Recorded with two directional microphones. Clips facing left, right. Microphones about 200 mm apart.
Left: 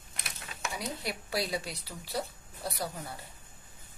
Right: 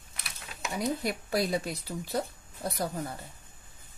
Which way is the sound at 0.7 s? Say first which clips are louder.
Right 9 dB; 50° right (ahead or behind).